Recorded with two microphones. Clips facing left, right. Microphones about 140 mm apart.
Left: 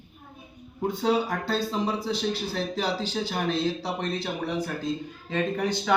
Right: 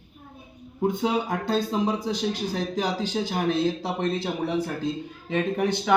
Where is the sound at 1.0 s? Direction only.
20° right (ahead or behind).